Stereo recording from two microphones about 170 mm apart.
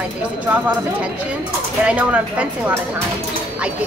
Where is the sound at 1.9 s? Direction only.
10° right (ahead or behind).